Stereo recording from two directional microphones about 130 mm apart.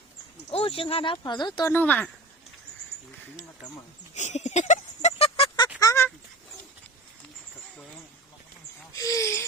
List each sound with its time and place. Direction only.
0.5 s speech: 45° left (ahead or behind)
1.7 s speech: 15° left (ahead or behind)
4.1 s a sound: 65° left (ahead or behind)
5.8 s fowl: 25° left (ahead or behind)
9.0 s wheeze: 25° left (ahead or behind)